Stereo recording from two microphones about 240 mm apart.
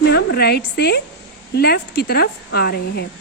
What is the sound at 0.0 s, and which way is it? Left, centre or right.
A woman's voice, left.